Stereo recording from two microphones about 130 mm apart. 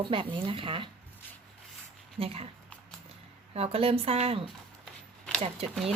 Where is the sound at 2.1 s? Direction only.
50° right (ahead or behind).